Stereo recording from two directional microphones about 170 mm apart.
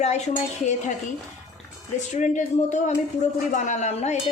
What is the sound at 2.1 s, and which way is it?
Speech, 45° left (ahead or behind).